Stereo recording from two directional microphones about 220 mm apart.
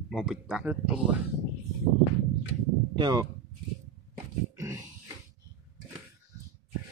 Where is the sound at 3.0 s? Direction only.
15° right (ahead or behind).